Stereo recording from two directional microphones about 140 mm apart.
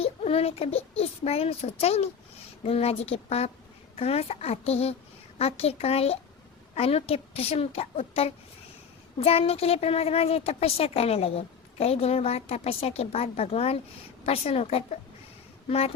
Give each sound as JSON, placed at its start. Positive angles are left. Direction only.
{"t": 0.0, "sound": "a woman's voice", "side_deg": 45}